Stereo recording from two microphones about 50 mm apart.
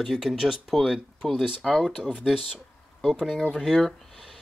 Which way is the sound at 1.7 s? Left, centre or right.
Centre.